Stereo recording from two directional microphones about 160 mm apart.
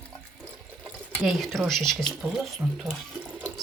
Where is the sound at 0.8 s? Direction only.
Centre (ahead or behind).